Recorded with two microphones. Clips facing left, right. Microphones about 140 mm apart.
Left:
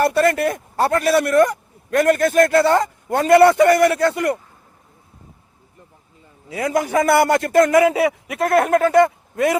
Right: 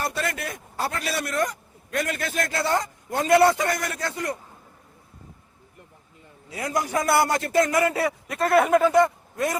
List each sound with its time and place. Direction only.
0.0 s a man's voice: 60° left (ahead or behind)
6.6 s a man's voice: 70° left (ahead or behind)
7.7 s a man's voice: 90° left
8.0 s a man's voice: 70° left (ahead or behind)
8.4 s speech: centre (ahead or behind)
8.7 s a man's voice: 60° left (ahead or behind)